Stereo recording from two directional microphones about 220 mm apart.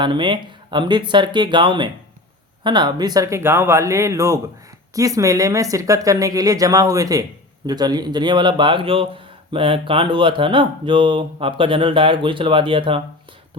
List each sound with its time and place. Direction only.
0.0 s speech: 20° right (ahead or behind)